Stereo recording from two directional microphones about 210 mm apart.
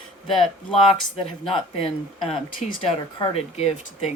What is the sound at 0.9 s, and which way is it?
Speech, 30° left (ahead or behind).